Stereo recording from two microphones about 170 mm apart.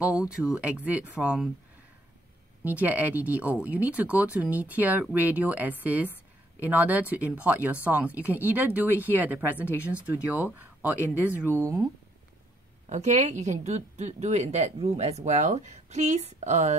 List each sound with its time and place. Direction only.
0.2 s speech: 5° right (ahead or behind)
2.6 s speech: 10° right (ahead or behind)
12.9 s a woman's voice: 45° right (ahead or behind)